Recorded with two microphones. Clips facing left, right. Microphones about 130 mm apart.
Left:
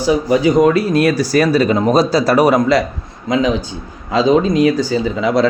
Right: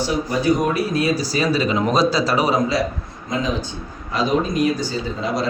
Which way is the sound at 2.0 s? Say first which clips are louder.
Left 6 dB; 55° left (ahead or behind).